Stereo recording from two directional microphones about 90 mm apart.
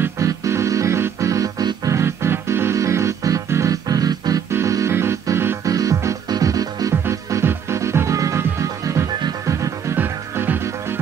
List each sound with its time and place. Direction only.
0.2 s music: 35° right (ahead or behind)
1.9 s music: 30° right (ahead or behind)
5.7 s music: 40° right (ahead or behind)
9.9 s music: 25° right (ahead or behind)